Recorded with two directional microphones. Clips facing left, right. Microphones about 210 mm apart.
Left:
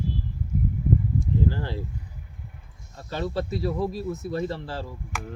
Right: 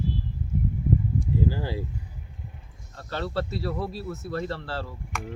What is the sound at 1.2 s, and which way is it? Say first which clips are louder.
Speech: even; 10° right (ahead or behind).